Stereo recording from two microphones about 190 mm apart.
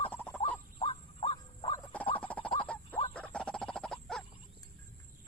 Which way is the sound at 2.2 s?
5° left (ahead or behind).